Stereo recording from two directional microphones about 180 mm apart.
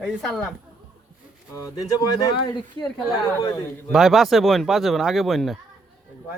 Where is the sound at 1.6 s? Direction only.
20° left (ahead or behind).